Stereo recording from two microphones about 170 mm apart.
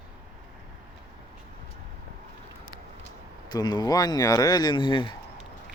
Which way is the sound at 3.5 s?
25° left (ahead or behind).